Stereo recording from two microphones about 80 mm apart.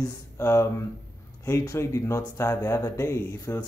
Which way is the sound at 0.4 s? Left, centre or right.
Left.